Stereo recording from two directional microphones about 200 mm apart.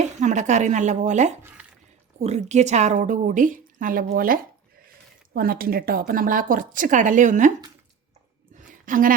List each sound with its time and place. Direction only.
0.2 s a woman's voice: 35° right (ahead or behind)
1.4 s speech: 10° right (ahead or behind)
2.1 s a woman's voice: 35° right (ahead or behind)
8.5 s a sound: 40° right (ahead or behind)